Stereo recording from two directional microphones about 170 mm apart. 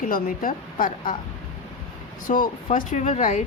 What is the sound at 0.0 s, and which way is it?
A woman's voice, 55° left (ahead or behind).